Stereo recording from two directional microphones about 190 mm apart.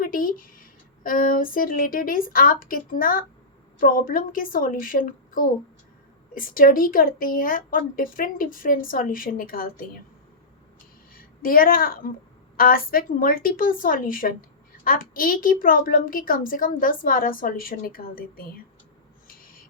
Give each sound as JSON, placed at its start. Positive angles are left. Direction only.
{"t": 0.0, "sound": "a woman's voice", "side_deg": 45}
{"t": 11.1, "sound": "a woman's voice", "side_deg": 50}
{"t": 19.3, "sound": "crow", "side_deg": 45}